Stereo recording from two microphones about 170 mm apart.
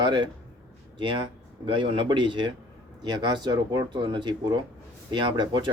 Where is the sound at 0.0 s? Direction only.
30° right (ahead or behind).